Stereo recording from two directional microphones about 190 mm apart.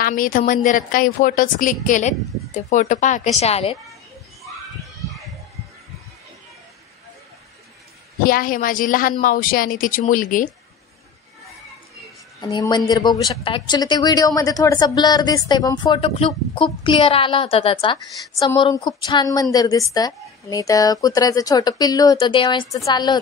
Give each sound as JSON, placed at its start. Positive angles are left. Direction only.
{"t": 0.0, "sound": "a woman's voice", "side_deg": 45}
{"t": 8.2, "sound": "a woman's voice", "side_deg": 50}
{"t": 12.4, "sound": "a woman's voice", "side_deg": 20}